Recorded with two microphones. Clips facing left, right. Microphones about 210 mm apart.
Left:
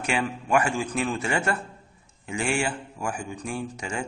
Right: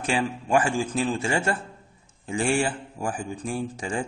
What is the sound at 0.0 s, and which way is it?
A man's voice, 30° right (ahead or behind).